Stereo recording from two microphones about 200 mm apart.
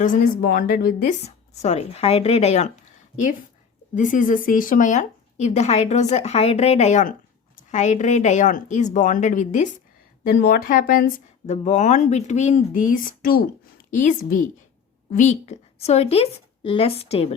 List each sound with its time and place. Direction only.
0.0 s speech: 45° left (ahead or behind)
1.2 s speech: 30° left (ahead or behind)
3.9 s speech: 40° left (ahead or behind)